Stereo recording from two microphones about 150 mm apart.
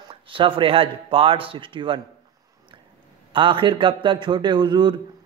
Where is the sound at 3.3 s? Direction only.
35° right (ahead or behind).